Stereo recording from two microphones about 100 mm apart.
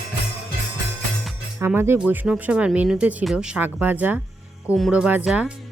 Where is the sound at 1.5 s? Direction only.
25° right (ahead or behind).